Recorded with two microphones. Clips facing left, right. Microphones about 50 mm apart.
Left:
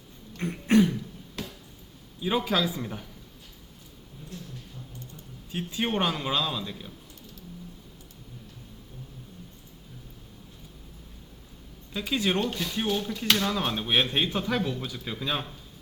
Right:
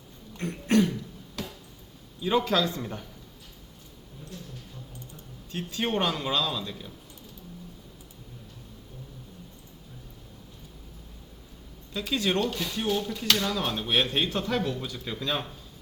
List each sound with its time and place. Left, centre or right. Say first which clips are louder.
0.3 s a sound: left 2 dB; centre
2.2 s speech: right 1 dB; centre
5.5 s speech: even; centre
11.9 s speech: even; centre
13.0 s speech: left 1 dB; centre